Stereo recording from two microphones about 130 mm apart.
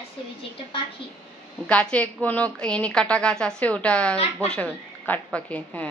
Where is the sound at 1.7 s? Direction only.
10° left (ahead or behind).